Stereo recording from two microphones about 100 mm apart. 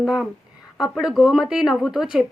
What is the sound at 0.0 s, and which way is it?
A woman's voice, 5° right (ahead or behind).